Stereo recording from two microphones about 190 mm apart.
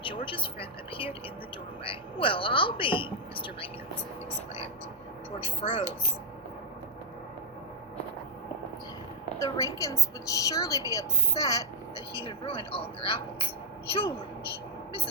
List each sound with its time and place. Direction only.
0.0 s a woman's voice: 25° left (ahead or behind)
5.6 s a woman's voice: 30° left (ahead or behind)
9.4 s a woman's voice: 15° left (ahead or behind)
11.9 s a woman's voice: 30° left (ahead or behind)